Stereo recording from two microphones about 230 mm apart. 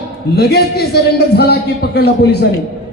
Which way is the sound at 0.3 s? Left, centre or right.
Left.